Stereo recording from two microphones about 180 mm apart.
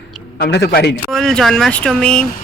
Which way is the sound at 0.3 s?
65° left (ahead or behind).